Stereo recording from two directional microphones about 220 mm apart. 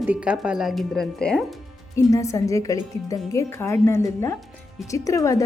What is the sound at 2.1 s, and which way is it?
Speech, 15° left (ahead or behind).